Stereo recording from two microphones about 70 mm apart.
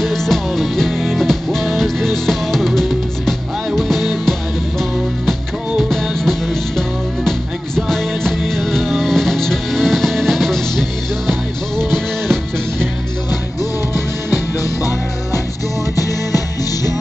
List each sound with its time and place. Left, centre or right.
0.0 s music: centre
14.6 s music: left